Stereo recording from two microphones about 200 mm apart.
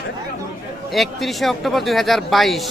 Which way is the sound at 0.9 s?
Centre (ahead or behind).